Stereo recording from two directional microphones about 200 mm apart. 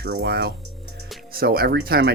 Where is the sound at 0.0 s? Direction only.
50° right (ahead or behind).